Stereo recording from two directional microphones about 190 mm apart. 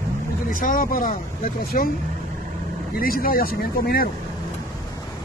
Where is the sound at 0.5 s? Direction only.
45° left (ahead or behind).